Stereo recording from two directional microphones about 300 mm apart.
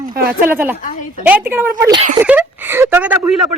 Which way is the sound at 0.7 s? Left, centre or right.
Left.